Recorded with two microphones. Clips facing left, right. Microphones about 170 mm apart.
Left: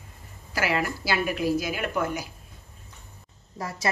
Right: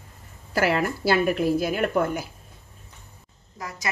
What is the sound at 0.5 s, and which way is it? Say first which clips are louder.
A woman's voice: right 4 dB; 50° right (ahead or behind).